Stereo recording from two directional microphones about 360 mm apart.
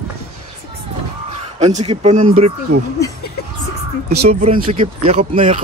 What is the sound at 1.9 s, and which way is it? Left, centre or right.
Speech, centre.